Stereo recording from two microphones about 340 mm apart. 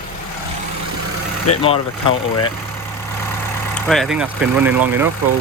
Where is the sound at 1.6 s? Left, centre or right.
Centre.